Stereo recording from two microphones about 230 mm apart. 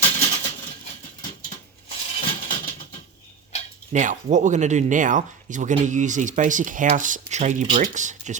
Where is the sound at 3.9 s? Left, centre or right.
Right.